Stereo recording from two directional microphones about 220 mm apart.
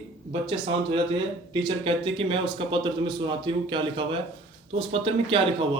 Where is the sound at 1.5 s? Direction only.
20° right (ahead or behind).